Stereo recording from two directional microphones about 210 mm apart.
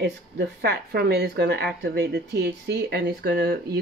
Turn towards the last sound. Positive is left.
turn(degrees=-50)  # may be behind; listen again after turning